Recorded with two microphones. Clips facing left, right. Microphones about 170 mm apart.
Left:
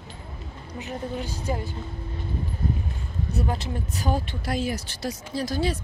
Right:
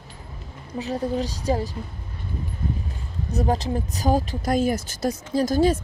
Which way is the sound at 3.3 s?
40° right (ahead or behind).